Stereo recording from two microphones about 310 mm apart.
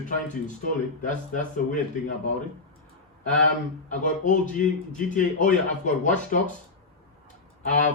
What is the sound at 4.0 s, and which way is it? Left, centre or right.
Speech, left.